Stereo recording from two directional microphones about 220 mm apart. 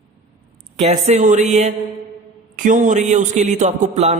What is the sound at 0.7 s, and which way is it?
Speech, 30° right (ahead or behind).